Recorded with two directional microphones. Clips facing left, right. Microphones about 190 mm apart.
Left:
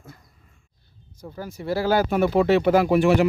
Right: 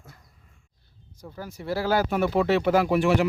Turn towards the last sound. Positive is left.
turn(degrees=45)  # may be behind; listen again after turning